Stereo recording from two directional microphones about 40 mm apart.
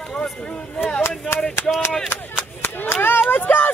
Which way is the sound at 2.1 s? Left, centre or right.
Left.